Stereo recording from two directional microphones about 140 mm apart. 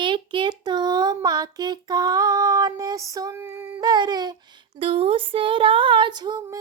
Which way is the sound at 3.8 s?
30° right (ahead or behind).